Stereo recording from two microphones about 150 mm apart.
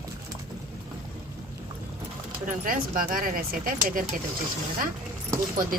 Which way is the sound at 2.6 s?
70° right (ahead or behind).